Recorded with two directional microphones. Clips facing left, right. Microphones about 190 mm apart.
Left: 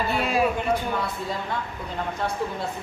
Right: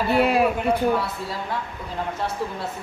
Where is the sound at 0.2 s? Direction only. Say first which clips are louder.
Right 4 dB; 60° right (ahead or behind).